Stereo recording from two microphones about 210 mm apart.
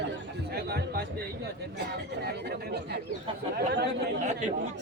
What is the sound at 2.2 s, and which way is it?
Speech, 50° right (ahead or behind).